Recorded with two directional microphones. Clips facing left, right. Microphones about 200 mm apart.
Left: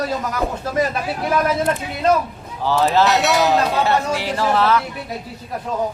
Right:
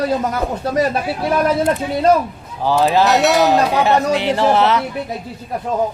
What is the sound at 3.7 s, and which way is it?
Speech, 15° right (ahead or behind).